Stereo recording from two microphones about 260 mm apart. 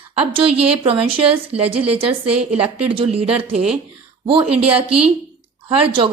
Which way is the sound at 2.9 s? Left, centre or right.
Right.